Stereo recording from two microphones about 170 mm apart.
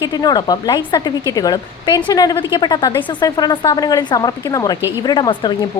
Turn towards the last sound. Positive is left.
turn(degrees=25)  # may be behind; listen again after turning